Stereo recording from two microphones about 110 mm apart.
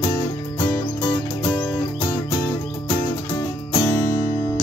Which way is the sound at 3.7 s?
35° left (ahead or behind).